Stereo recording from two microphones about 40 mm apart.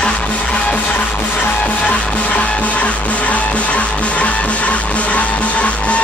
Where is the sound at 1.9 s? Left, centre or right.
Left.